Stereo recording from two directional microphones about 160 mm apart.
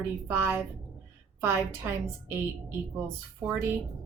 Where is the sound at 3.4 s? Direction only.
10° right (ahead or behind).